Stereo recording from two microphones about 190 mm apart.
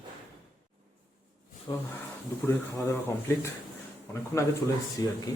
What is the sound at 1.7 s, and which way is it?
Speech, 25° left (ahead or behind).